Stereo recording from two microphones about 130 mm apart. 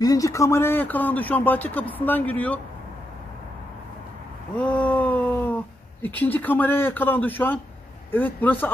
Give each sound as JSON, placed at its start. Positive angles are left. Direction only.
{"t": 0.0, "sound": "speech", "side_deg": 25}
{"t": 4.6, "sound": "a sound", "side_deg": 10}
{"t": 6.0, "sound": "speech", "side_deg": 15}